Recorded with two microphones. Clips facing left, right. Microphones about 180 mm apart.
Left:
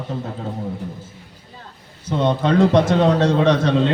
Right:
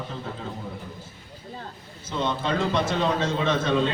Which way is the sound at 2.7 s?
75° left (ahead or behind).